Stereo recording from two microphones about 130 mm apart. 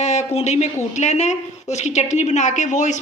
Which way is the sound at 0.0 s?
60° left (ahead or behind).